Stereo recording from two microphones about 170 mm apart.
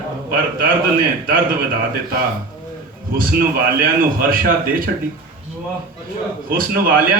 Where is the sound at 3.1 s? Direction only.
60° right (ahead or behind).